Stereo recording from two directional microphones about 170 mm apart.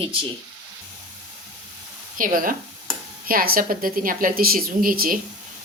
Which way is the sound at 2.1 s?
55° right (ahead or behind).